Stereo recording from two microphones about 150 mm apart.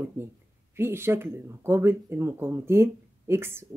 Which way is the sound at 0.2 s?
15° right (ahead or behind).